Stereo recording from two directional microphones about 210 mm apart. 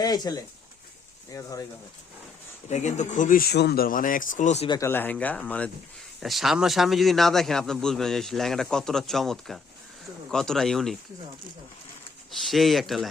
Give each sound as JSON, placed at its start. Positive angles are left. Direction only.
{"t": 0.0, "sound": "speech", "side_deg": 20}
{"t": 2.6, "sound": "speech", "side_deg": 35}
{"t": 4.7, "sound": "a man's voice", "side_deg": 10}
{"t": 12.5, "sound": "a man's voice", "side_deg": 0}